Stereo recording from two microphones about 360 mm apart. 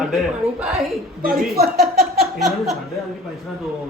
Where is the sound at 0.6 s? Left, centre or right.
Centre.